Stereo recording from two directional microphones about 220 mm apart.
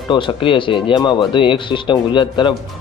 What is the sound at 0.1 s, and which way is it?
Speech, 20° left (ahead or behind).